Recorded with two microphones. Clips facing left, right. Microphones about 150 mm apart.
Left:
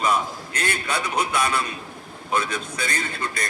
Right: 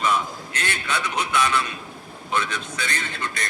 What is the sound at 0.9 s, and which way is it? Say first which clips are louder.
Speech: even; 35° left (ahead or behind).